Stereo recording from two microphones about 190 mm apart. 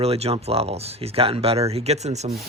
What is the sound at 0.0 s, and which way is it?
Speech, 30° right (ahead or behind).